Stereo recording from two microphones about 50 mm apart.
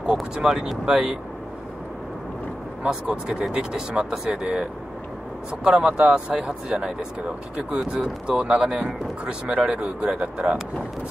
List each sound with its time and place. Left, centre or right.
0.0 s speech: centre
2.8 s speech: centre